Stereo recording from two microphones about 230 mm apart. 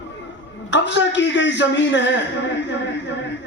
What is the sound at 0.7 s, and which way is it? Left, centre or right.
A man's voice, left.